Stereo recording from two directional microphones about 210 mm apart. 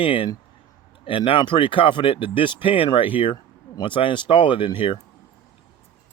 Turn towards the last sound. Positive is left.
turn(degrees=25)  # may be behind; listen again after turning